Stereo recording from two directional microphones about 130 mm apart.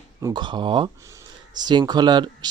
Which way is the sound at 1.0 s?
25° right (ahead or behind).